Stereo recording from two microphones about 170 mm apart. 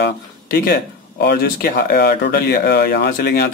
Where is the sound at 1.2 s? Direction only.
70° left (ahead or behind).